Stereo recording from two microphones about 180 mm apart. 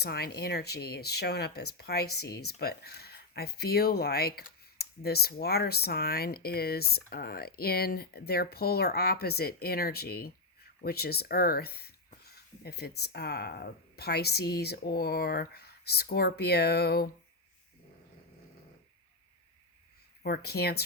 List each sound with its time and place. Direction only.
0.0 s speech: 60° left (ahead or behind)
20.2 s speech: 60° left (ahead or behind)